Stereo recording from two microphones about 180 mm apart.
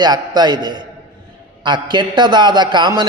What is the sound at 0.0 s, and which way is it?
A man's voice, 25° right (ahead or behind).